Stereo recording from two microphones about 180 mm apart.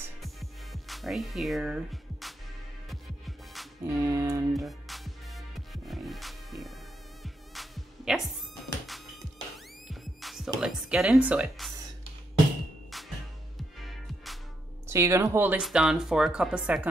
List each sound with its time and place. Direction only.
0.2 s music: centre (ahead or behind)
3.8 s music: 15° right (ahead or behind)
4.6 s music: centre (ahead or behind)
9.8 s music: centre (ahead or behind)
10.6 s speech: 5° right (ahead or behind)
12.9 s music: centre (ahead or behind)
14.9 s speech: 15° right (ahead or behind)